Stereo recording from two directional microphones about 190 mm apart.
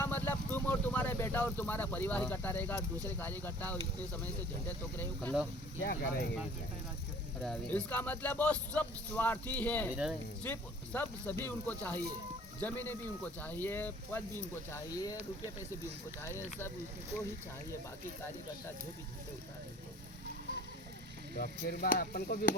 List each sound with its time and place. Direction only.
0.0 s vehicle: 10° left (ahead or behind)
3.2 s speech: 10° left (ahead or behind)
5.8 s speech: 50° left (ahead or behind)
7.4 s speech: 5° left (ahead or behind)
9.9 s speech: 5° right (ahead or behind)
10.4 s speech: 10° left (ahead or behind)
21.3 s speech: 55° left (ahead or behind)